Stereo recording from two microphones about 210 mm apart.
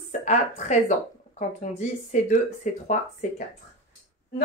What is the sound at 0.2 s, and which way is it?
A woman's voice, 35° left (ahead or behind).